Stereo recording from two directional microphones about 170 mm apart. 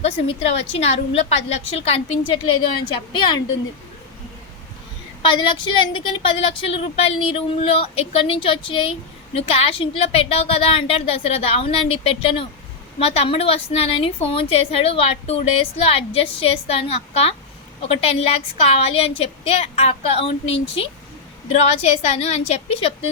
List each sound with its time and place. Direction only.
0.0 s a woman's voice: 35° left (ahead or behind)
5.2 s speech: 30° left (ahead or behind)